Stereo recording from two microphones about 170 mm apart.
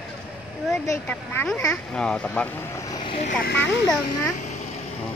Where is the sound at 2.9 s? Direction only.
25° left (ahead or behind).